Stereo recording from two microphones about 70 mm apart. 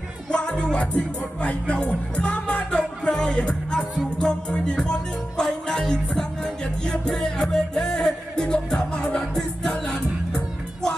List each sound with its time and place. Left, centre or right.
0.3 s music: centre